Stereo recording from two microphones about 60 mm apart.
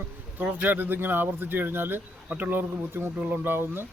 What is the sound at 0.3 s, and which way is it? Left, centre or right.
A man's voice, right.